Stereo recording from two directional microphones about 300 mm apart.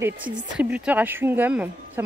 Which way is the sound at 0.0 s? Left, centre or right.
Centre.